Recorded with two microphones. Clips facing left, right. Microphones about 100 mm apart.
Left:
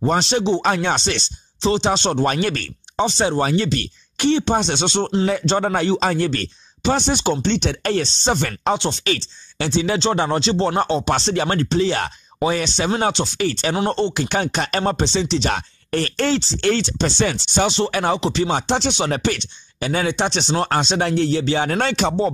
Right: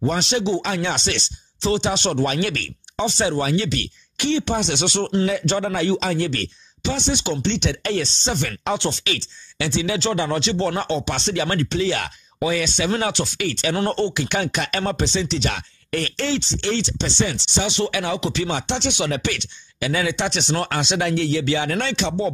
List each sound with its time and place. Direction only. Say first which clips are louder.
0.0 s speech: left 3 dB; 35° left (ahead or behind)
0.7 s speech: left 4 dB; 45° left (ahead or behind); by 5.2 s 25° left (ahead or behind)
5.6 s speech: left 3 dB; 45° left (ahead or behind)
13.7 s speech: left 1 dB; 20° left (ahead or behind)
14.1 s speech: left 2 dB; 35° left (ahead or behind)
17.2 s chopping: left 3 dB; 55° left (ahead or behind)
17.6 s speech: left 2 dB; 35° left (ahead or behind)